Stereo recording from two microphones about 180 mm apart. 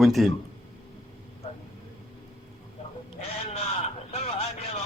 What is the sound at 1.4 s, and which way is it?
Vehicle, 35° left (ahead or behind).